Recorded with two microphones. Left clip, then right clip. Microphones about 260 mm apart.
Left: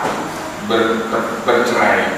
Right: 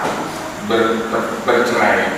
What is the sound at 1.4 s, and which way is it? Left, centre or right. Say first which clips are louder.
Speech: even; centre.